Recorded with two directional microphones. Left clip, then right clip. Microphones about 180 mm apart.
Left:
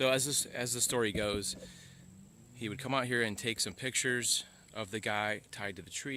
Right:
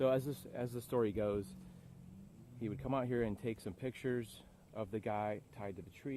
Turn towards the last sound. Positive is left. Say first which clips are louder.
# left 6 dB
turn(degrees=15)  # may be behind; listen again after turning